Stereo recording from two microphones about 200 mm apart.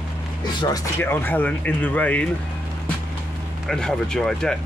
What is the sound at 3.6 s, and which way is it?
Speech, 5° left (ahead or behind).